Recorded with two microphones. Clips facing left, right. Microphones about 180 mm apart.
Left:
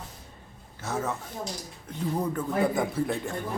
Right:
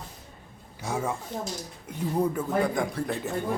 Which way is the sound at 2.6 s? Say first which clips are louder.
Left 1 dB; 5° left (ahead or behind).